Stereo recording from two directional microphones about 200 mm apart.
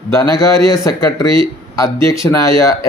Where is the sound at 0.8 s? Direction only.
15° left (ahead or behind).